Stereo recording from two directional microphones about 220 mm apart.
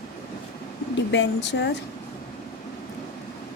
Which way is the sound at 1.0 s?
55° left (ahead or behind).